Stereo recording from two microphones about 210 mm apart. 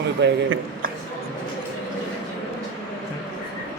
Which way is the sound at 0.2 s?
55° right (ahead or behind).